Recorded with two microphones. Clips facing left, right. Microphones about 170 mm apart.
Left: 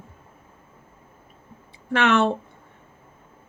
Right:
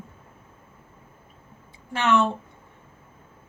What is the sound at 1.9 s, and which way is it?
Speech, 70° left (ahead or behind).